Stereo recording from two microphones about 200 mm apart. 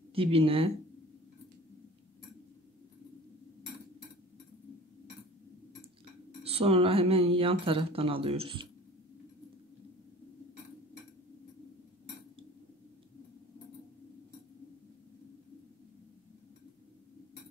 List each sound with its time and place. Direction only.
0.1 s speech: 30° right (ahead or behind)
6.4 s speech: 30° right (ahead or behind)